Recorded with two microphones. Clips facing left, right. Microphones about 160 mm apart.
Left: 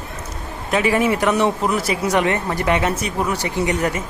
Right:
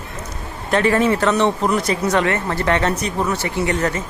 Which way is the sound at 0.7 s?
10° left (ahead or behind).